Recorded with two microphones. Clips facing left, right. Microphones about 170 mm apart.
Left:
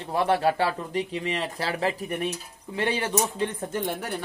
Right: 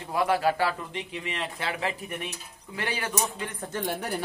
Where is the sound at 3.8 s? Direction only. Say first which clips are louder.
Left 1 dB; centre (ahead or behind).